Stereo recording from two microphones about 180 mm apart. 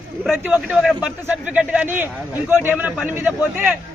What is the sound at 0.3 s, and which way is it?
Speech, 10° right (ahead or behind).